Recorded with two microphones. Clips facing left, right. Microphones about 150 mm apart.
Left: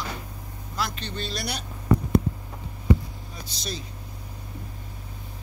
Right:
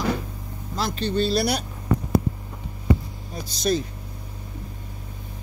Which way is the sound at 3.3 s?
45° right (ahead or behind).